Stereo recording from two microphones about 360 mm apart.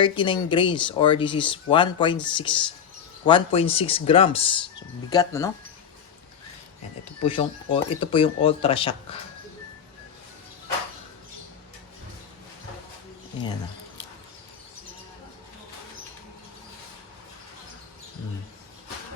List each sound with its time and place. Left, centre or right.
0.0 s speech: centre
7.2 s speech: centre